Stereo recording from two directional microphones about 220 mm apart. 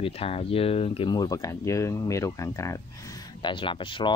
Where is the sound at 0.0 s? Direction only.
25° left (ahead or behind).